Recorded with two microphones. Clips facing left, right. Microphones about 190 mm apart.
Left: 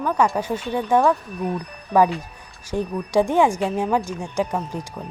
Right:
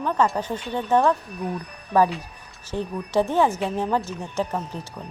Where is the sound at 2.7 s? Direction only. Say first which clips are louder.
Left 3 dB; 15° left (ahead or behind).